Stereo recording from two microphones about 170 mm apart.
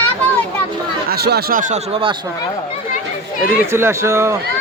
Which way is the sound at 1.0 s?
70° right (ahead or behind).